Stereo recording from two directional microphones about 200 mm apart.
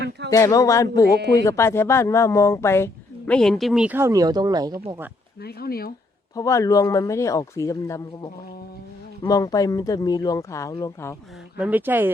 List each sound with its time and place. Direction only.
0.3 s speech: 15° left (ahead or behind); by 4.7 s 20° right (ahead or behind)
5.4 s speech: 50° left (ahead or behind)
6.3 s speech: 15° left (ahead or behind)
11.5 s speech: 10° right (ahead or behind)